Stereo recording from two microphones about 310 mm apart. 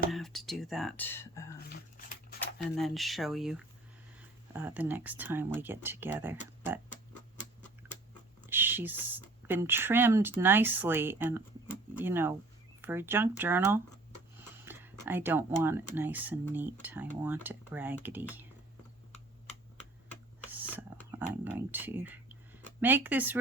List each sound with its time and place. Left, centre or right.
0.1 s speech: centre
1.7 s dog: left
2.7 s speech: centre
8.4 s speech: centre
14.6 s a sound: centre
16.0 s speech: centre
21.1 s speech: centre